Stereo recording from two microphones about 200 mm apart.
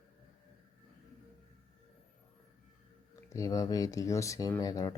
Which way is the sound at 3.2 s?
15° left (ahead or behind).